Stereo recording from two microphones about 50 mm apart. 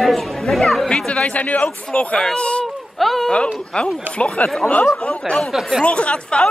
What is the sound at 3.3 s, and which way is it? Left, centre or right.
Speech, centre.